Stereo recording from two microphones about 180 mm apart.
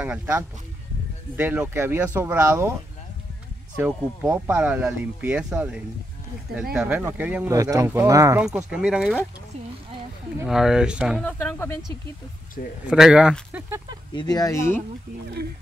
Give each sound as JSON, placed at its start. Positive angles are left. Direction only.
{"t": 0.0, "sound": "speech", "side_deg": -10}
{"t": 3.8, "sound": "speech", "side_deg": -10}
{"t": 8.4, "sound": "speech", "side_deg": -5}
{"t": 10.4, "sound": "speech", "side_deg": 0}
{"t": 11.2, "sound": "speech", "side_deg": 10}
{"t": 12.8, "sound": "speech", "side_deg": -5}
{"t": 14.1, "sound": "speech", "side_deg": 20}